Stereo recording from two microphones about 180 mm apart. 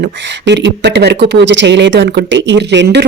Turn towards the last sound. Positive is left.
turn(degrees=-80)